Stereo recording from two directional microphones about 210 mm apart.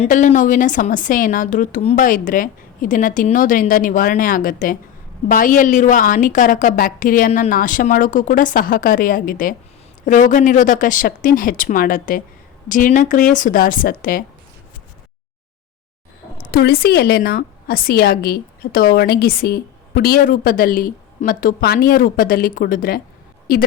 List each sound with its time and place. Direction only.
0.0 s a woman's voice: 35° left (ahead or behind)
16.4 s a woman's voice: 45° left (ahead or behind)